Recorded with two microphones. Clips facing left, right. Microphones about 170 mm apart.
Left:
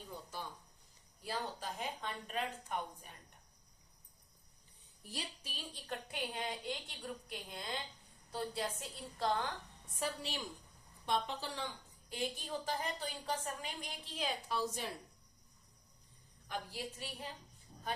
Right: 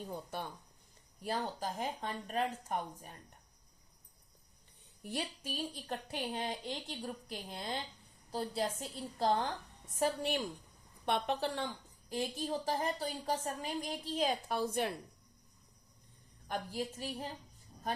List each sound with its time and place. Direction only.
0.3 s a sound: 60° right (ahead or behind)
1.2 s a woman's voice: 50° right (ahead or behind)
5.0 s a woman's voice: 55° right (ahead or behind)
5.9 s a woman's voice: 35° right (ahead or behind)
10.0 s a woman's voice: 55° right (ahead or behind)
12.0 s a woman's voice: 40° right (ahead or behind); by 14.9 s 60° right (ahead or behind)
16.5 s a woman's voice: 45° right (ahead or behind)